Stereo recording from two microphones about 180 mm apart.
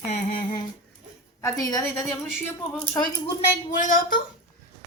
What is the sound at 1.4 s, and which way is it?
Speech, 20° left (ahead or behind).